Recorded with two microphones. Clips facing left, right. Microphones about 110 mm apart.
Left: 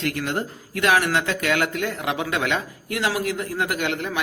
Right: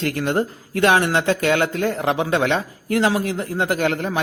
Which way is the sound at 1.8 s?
35° right (ahead or behind).